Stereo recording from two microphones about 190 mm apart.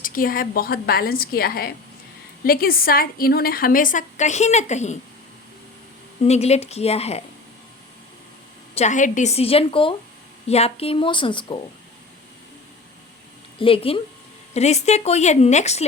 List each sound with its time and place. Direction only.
0.0 s a woman's voice: 45° left (ahead or behind)
6.2 s speech: 35° left (ahead or behind)
8.7 s a woman's voice: 40° left (ahead or behind)
13.6 s a woman's voice: 30° left (ahead or behind)